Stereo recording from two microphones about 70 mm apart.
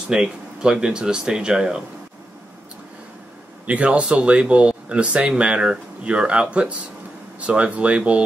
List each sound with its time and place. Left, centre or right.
0.1 s speech: centre
3.6 s speech: centre